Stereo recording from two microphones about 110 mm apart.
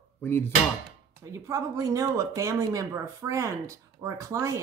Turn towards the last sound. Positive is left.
turn(degrees=-30)  # may be behind; listen again after turning